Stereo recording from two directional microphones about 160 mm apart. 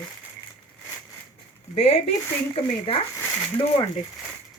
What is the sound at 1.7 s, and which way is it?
Speech, 40° left (ahead or behind).